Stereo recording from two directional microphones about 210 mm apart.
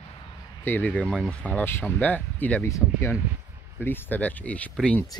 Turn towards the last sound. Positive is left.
turn(degrees=5)  # may be behind; listen again after turning